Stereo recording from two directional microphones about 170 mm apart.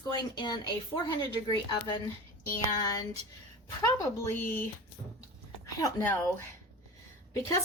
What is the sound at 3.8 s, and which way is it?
Speech, 15° left (ahead or behind).